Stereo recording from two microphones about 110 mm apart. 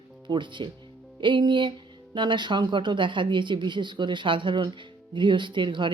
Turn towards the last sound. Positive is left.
turn(degrees=-45)  # may be behind; listen again after turning